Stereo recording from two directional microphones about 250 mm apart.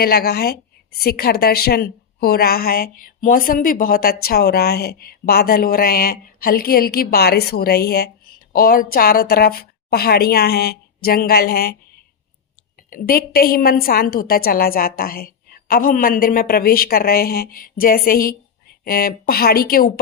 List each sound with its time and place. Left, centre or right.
0.0 s a woman's voice: left
12.9 s a woman's voice: left